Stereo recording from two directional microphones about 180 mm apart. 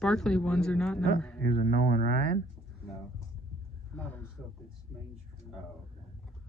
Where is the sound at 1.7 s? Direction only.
50° right (ahead or behind).